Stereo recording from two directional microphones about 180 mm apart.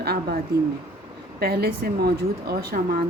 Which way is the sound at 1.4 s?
60° right (ahead or behind).